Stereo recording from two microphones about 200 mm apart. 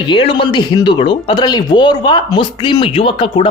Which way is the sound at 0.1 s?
25° left (ahead or behind).